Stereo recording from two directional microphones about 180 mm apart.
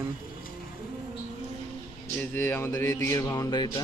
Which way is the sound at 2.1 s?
10° left (ahead or behind).